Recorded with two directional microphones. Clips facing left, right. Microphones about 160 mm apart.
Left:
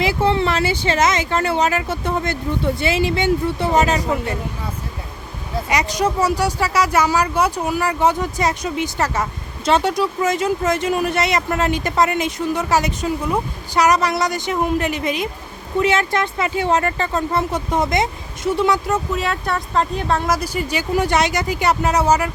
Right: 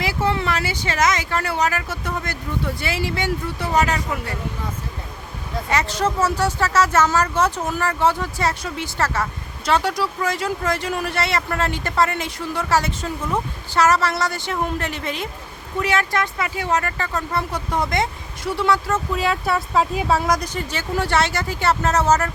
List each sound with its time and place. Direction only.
0.0 s speech: 25° left (ahead or behind)
5.6 s speech: 15° left (ahead or behind)
19.1 s speech: centre (ahead or behind)